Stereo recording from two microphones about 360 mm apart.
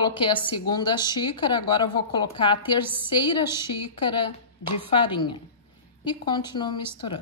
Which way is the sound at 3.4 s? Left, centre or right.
Centre.